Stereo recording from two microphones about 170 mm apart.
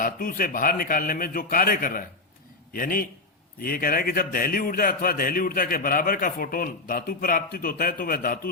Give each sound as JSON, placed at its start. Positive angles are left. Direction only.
{"t": 0.0, "sound": "a man's voice", "side_deg": 55}